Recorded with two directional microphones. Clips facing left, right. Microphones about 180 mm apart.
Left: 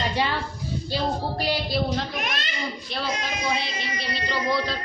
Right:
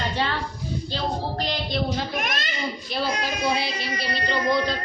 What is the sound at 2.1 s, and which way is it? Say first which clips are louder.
Speech: right 2 dB; 45° right (ahead or behind).